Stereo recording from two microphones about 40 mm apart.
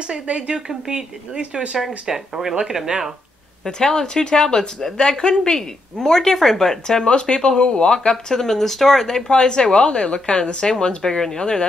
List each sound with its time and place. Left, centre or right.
0.1 s speech: right
1.8 s speech: centre
3.6 s speech: centre
7.1 s speech: left
9.3 s a woman's voice: left